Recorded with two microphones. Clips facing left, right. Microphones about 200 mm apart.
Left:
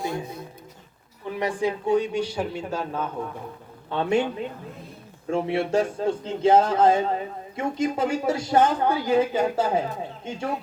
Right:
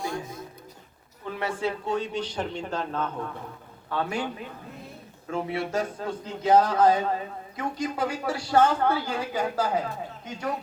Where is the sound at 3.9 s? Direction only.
25° left (ahead or behind).